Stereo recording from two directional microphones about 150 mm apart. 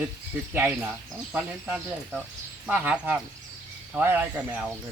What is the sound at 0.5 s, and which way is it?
Speech, 10° right (ahead or behind).